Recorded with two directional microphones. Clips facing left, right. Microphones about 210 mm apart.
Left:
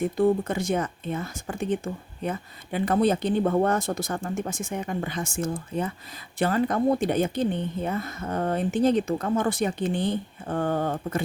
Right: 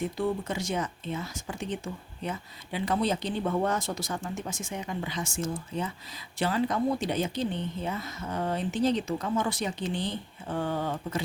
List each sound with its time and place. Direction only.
0.0 s speech: 50° left (ahead or behind)